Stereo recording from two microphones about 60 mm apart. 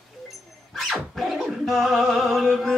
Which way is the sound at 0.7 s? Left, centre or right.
Centre.